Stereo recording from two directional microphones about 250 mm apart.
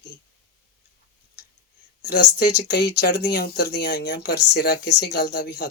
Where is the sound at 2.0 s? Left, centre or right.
Left.